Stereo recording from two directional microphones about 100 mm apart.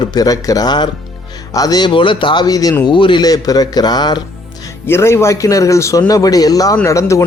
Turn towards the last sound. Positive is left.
turn(degrees=30)  # may be behind; listen again after turning